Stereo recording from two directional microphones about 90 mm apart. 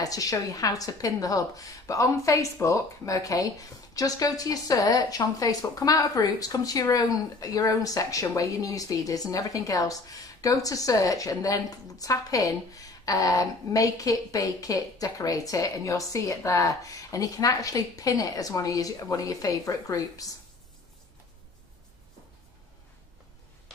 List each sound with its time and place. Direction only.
0.0 s a woman's voice: 40° left (ahead or behind)